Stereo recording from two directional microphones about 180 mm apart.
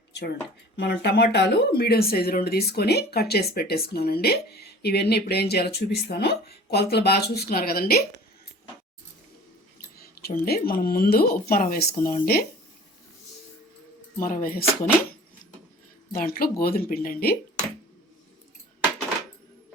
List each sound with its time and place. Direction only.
0.8 s speech: 70° left (ahead or behind)
10.0 s speech: 60° left (ahead or behind)
14.2 s speech: 50° left (ahead or behind)
16.1 s speech: 55° left (ahead or behind)